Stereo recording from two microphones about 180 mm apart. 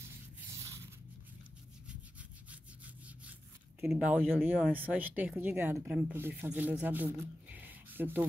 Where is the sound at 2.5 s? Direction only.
10° right (ahead or behind).